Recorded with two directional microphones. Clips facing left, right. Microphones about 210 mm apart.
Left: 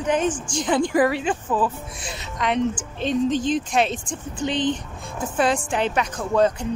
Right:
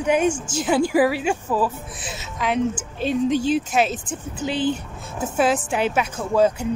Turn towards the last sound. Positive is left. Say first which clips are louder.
# right 1 dB
turn(degrees=-5)  # may be behind; listen again after turning